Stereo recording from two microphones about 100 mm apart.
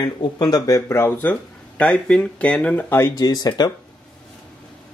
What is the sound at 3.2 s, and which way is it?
Speech, 40° left (ahead or behind).